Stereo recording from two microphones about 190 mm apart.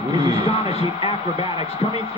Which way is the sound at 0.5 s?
30° left (ahead or behind).